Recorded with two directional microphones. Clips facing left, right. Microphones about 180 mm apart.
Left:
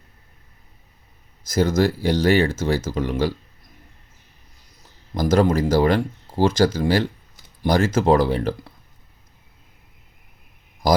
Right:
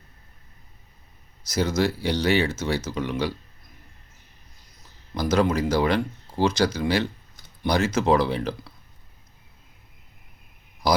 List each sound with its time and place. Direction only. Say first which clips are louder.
1.5 s speech: left 4 dB; 50° left (ahead or behind)
5.1 s speech: left 4 dB; 45° left (ahead or behind)